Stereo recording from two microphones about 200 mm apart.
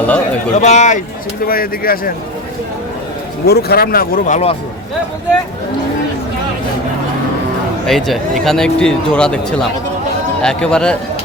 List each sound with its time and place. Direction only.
0.5 s speech: 35° left (ahead or behind)
1.5 s speech: 45° left (ahead or behind)
3.4 s speech: 50° left (ahead or behind)
7.9 s speech: centre (ahead or behind)